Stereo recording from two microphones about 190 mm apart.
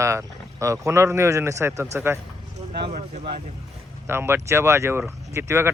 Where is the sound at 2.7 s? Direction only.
40° right (ahead or behind).